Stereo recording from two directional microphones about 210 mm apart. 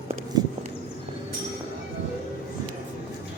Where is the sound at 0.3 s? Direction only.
20° right (ahead or behind).